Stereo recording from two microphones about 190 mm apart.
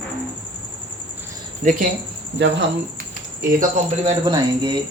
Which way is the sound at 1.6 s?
40° right (ahead or behind).